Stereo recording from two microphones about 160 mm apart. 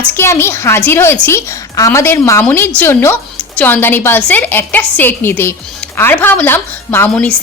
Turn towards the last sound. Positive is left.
turn(degrees=15)  # may be behind; listen again after turning